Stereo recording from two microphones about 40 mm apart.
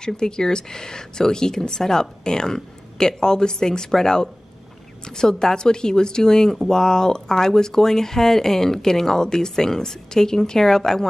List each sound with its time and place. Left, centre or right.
0.0 s a woman's voice: centre